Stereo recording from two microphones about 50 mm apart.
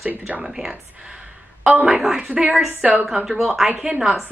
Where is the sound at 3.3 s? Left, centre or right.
Centre.